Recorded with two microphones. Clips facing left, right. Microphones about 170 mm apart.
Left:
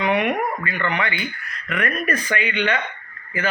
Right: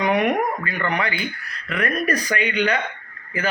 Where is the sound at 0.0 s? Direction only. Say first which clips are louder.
Right 1 dB; 40° right (ahead or behind).